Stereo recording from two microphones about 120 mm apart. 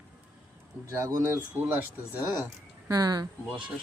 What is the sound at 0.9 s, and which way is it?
Speech, 25° right (ahead or behind).